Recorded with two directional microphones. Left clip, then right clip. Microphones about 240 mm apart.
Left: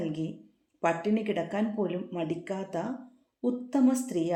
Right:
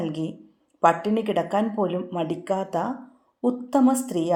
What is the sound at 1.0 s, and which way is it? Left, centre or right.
Speech, centre.